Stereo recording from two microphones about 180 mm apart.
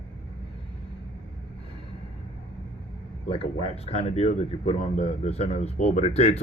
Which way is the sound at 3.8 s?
35° left (ahead or behind).